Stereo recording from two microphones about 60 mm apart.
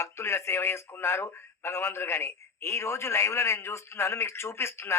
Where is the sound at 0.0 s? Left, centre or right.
Left.